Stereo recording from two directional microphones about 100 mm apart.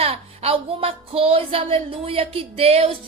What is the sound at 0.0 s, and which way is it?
A woman's voice, 75° right (ahead or behind).